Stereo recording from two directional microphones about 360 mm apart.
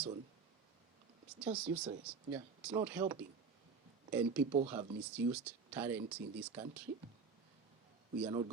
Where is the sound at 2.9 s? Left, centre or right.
Centre.